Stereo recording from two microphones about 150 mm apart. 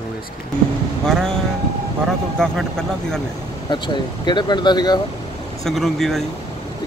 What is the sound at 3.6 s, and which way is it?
Speech, 30° left (ahead or behind).